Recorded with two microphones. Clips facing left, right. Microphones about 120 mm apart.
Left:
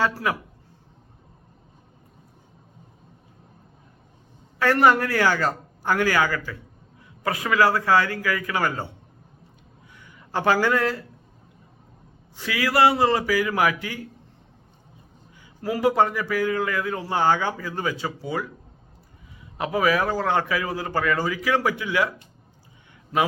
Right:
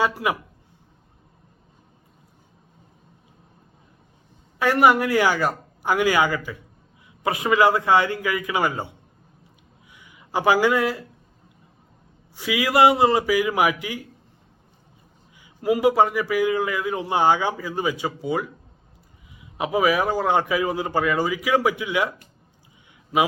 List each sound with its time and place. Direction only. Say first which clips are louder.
0.0 s a man's voice: right 1 dB; 15° right (ahead or behind)
4.6 s a man's voice: right 1 dB; 10° right (ahead or behind)
9.9 s a sound: right 2 dB; 10° right (ahead or behind)
12.4 s a man's voice: right 2 dB; 15° right (ahead or behind)
15.4 s a sound: right 4 dB; 15° right (ahead or behind)
15.9 s a man's voice: left 1 dB; 10° right (ahead or behind)
19.5 s a man's voice: right 1 dB; 10° right (ahead or behind)